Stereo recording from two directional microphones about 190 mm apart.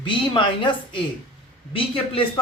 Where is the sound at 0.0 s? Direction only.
25° left (ahead or behind).